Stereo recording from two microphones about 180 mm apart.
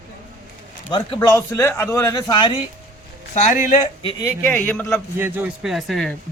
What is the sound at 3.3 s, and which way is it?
Speech, 45° left (ahead or behind).